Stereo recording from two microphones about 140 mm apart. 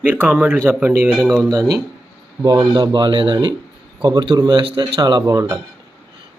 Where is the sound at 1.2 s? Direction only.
5° left (ahead or behind).